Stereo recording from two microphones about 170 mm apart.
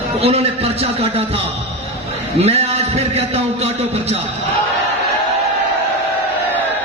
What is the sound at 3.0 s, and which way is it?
A man's voice, 40° right (ahead or behind).